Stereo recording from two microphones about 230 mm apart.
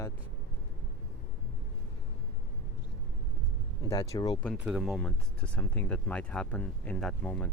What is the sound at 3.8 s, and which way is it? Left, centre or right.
Speech, centre.